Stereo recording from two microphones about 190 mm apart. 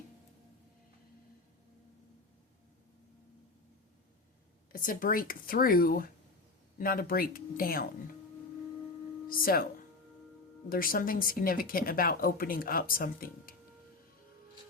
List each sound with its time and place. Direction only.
4.7 s speech: 45° left (ahead or behind)
9.3 s speech: 50° left (ahead or behind)
10.7 s speech: 50° left (ahead or behind)